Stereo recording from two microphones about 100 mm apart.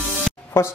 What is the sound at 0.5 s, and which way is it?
Speech, 25° left (ahead or behind).